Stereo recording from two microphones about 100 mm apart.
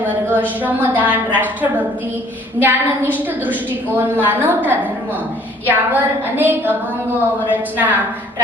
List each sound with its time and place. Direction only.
0.0 s a woman's voice: 20° right (ahead or behind)